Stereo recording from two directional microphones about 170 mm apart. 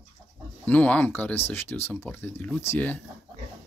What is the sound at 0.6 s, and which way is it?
Speech, 10° left (ahead or behind).